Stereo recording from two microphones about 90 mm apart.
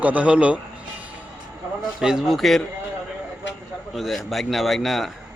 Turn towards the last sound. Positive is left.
turn(degrees=0)  # may be behind; listen again after turning